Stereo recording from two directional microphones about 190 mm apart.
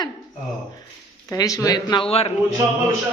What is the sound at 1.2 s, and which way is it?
A man's voice, 20° left (ahead or behind).